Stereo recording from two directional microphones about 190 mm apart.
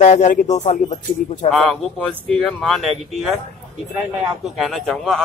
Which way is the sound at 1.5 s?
5° left (ahead or behind).